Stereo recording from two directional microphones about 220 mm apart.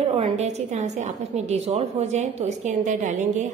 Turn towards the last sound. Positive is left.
turn(degrees=-35)  # may be behind; listen again after turning